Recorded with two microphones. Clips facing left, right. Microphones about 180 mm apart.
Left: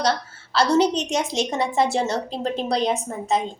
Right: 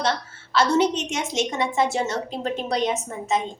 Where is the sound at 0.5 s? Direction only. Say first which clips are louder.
Left 1 dB; 35° left (ahead or behind).